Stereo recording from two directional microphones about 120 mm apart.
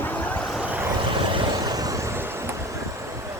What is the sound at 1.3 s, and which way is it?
Vehicle, 40° right (ahead or behind).